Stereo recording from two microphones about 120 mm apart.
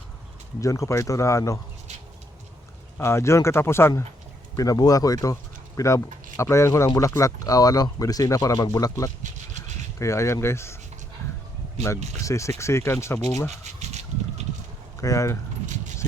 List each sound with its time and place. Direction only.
0.6 s speech: 25° left (ahead or behind)
3.0 s speech: 20° left (ahead or behind)
11.9 s speech: 70° right (ahead or behind)
12.2 s speech: 25° left (ahead or behind)
13.7 s a sound: 70° right (ahead or behind)
15.0 s speech: 25° left (ahead or behind)